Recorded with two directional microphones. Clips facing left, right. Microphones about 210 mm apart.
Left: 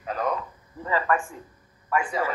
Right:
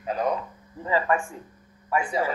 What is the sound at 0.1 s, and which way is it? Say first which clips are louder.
Speech: right 2 dB; 30° right (ahead or behind).